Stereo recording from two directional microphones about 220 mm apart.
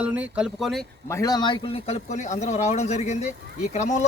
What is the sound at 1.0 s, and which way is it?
A man's voice, 15° left (ahead or behind).